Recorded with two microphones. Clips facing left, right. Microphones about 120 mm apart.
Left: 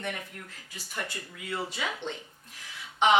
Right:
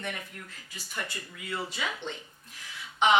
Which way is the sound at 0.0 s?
45° left (ahead or behind).